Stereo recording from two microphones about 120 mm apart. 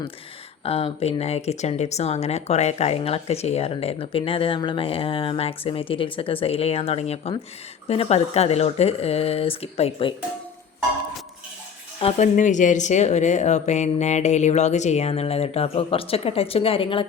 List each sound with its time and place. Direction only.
0.6 s speech: 55° left (ahead or behind)
11.9 s speech: 55° left (ahead or behind)
12.2 s speech: 90° left; by 17.1 s 45° left (ahead or behind)